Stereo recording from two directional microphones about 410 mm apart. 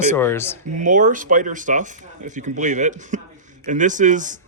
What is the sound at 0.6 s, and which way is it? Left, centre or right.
Speech, centre.